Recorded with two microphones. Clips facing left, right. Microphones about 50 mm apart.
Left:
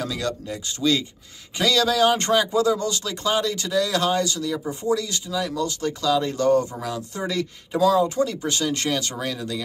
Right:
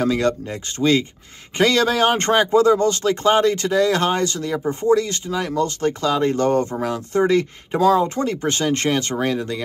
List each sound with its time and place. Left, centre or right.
0.0 s speech: right